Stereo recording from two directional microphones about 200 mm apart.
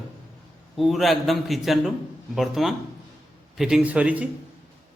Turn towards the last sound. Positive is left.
turn(degrees=-5)  # may be behind; listen again after turning